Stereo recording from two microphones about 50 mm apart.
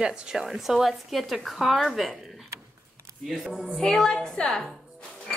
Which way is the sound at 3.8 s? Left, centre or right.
Centre.